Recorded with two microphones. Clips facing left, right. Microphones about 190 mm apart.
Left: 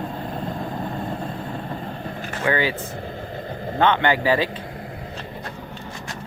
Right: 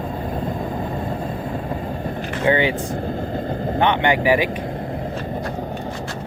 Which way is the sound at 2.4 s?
20° right (ahead or behind).